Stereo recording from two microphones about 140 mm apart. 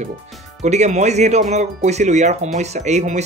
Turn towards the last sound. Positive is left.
turn(degrees=-55)  # may be behind; listen again after turning